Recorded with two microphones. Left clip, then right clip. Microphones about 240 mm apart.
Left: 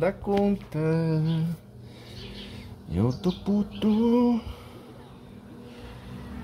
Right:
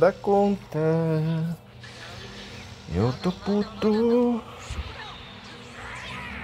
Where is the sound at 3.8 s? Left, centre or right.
Centre.